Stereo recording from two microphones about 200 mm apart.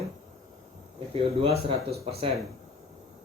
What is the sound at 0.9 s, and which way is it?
Speech, 30° right (ahead or behind).